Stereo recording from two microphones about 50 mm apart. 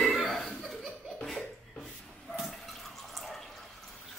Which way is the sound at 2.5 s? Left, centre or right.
Centre.